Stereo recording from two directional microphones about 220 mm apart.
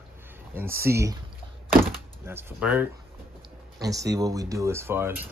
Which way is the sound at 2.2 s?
10° right (ahead or behind).